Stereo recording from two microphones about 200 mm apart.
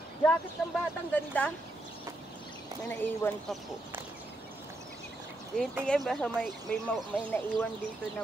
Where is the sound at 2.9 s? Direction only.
10° left (ahead or behind).